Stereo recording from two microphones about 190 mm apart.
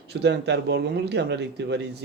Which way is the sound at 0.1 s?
60° right (ahead or behind).